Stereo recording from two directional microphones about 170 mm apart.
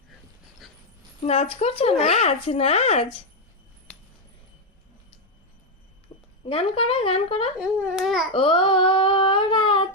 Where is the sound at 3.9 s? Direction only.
5° left (ahead or behind).